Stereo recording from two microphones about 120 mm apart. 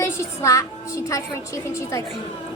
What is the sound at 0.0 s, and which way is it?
A woman's voice, 25° left (ahead or behind).